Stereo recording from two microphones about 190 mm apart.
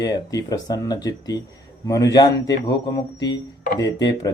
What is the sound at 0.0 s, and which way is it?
Speech, 20° left (ahead or behind).